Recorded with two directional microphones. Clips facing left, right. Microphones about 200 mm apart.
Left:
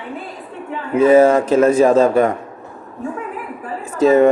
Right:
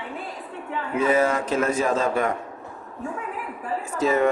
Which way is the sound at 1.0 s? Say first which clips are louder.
Left 11 dB; 30° left (ahead or behind).